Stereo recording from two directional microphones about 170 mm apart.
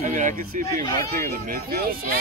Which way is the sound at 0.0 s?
50° right (ahead or behind).